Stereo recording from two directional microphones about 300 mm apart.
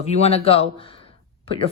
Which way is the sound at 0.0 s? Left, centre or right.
Left.